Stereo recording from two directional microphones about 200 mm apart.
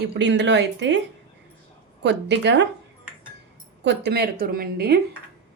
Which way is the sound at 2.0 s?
60° right (ahead or behind).